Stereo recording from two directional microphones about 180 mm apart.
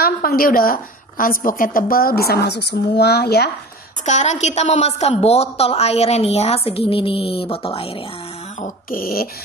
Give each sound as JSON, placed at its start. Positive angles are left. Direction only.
{"t": 0.0, "sound": "a woman's voice", "side_deg": 55}
{"t": 4.0, "sound": "a woman's voice", "side_deg": 40}
{"t": 8.5, "sound": "dog", "side_deg": 50}